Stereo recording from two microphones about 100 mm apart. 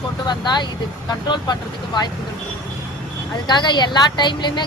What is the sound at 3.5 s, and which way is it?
Speech, 45° left (ahead or behind).